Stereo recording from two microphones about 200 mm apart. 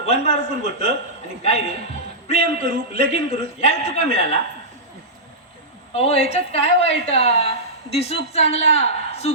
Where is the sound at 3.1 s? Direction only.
30° left (ahead or behind).